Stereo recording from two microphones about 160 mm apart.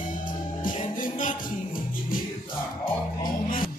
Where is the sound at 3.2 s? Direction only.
60° left (ahead or behind).